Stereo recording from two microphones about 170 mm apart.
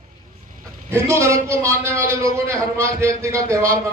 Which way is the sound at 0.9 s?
15° right (ahead or behind).